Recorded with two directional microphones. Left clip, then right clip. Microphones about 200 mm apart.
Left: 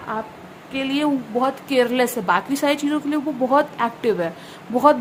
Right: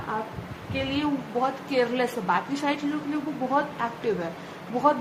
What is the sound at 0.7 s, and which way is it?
A woman's voice, 60° left (ahead or behind).